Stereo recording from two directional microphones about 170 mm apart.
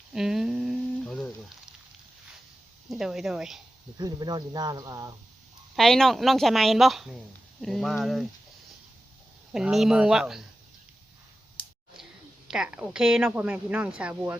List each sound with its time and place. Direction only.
0.1 s a sound: 5° right (ahead or behind)
2.9 s a woman's voice: centre (ahead or behind)
3.9 s speech: 25° right (ahead or behind)
5.7 s a woman's voice: centre (ahead or behind)
9.5 s a woman's voice: 5° right (ahead or behind)
12.5 s a woman's voice: 5° right (ahead or behind)